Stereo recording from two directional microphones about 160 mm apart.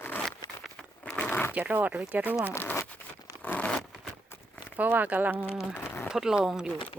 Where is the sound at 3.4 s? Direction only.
10° left (ahead or behind).